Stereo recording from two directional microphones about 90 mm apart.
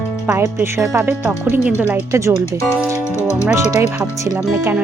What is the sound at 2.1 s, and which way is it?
Speech, 35° right (ahead or behind).